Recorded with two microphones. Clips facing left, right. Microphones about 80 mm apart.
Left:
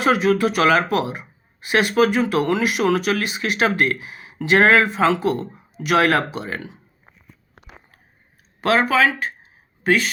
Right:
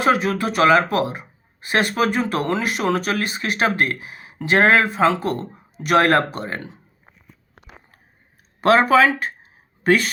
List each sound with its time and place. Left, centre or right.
0.0 s speech: right
5.2 s speech: right
8.6 s speech: right